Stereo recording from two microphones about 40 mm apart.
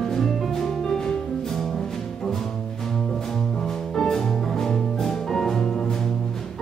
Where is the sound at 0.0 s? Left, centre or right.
Centre.